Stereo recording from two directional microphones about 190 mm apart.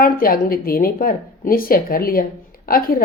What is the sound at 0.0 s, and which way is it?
Speech, 50° left (ahead or behind).